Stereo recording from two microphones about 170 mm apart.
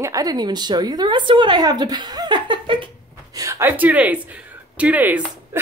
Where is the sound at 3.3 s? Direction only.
20° right (ahead or behind).